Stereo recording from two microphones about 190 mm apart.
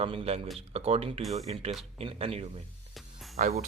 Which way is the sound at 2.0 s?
30° right (ahead or behind).